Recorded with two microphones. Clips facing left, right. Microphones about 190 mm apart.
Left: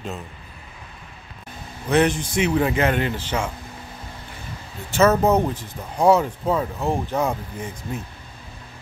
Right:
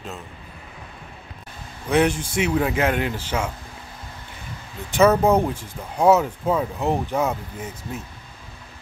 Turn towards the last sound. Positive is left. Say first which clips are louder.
# left 2 dB
turn(degrees=-5)  # may be behind; listen again after turning